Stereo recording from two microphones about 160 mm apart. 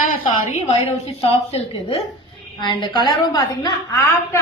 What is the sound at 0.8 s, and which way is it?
A woman's voice, 40° left (ahead or behind).